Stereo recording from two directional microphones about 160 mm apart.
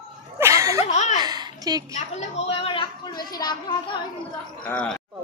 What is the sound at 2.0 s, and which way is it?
A woman's voice, 40° left (ahead or behind).